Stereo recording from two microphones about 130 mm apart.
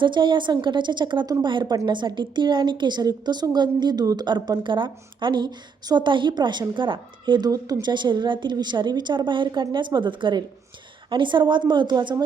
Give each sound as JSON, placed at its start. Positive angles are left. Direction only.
{"t": 0.0, "sound": "a woman's voice", "side_deg": -40}